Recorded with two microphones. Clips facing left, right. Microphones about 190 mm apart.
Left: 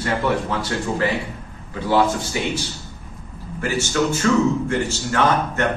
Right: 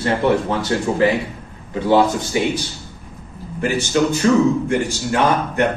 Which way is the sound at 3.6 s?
15° right (ahead or behind).